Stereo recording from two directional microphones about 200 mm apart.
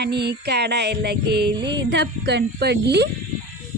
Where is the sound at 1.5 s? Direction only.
20° right (ahead or behind).